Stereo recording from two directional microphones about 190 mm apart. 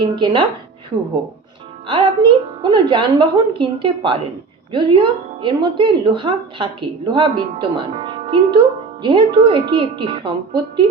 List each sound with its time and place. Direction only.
0.0 s speech: 25° right (ahead or behind)
1.9 s speech: 25° right (ahead or behind)